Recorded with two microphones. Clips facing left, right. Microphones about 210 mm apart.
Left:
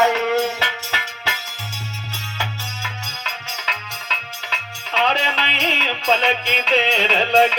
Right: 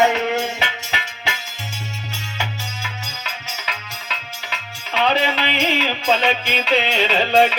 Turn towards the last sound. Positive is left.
turn(degrees=-10)  # may be behind; listen again after turning